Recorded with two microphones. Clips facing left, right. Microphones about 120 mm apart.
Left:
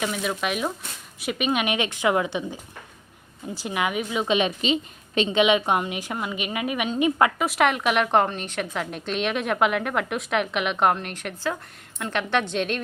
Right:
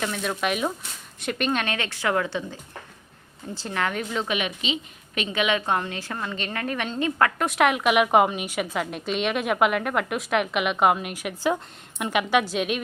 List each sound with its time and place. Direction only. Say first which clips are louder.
0.0 s a woman's voice: even; 5° left (ahead or behind)
4.3 s a woman's voice: left 5 dB; 30° left (ahead or behind)
7.3 s a woman's voice: even; centre (ahead or behind)